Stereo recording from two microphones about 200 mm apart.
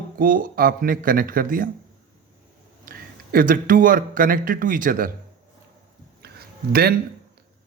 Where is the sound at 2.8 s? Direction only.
45° right (ahead or behind).